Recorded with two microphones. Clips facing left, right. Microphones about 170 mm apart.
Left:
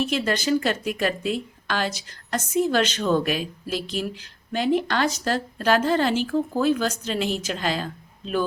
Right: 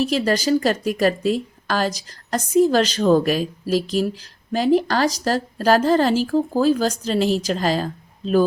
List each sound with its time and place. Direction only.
0.0 s a woman's voice: 35° right (ahead or behind)